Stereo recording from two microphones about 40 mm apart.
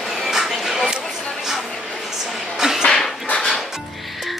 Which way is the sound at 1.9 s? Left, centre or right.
Centre.